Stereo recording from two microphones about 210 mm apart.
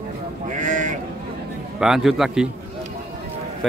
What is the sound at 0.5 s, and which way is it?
Sheep, 35° right (ahead or behind).